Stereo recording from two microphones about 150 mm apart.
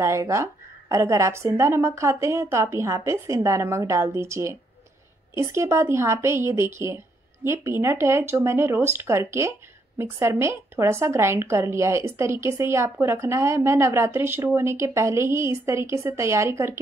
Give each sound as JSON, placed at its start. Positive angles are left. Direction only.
{"t": 0.0, "sound": "a woman's voice", "side_deg": -20}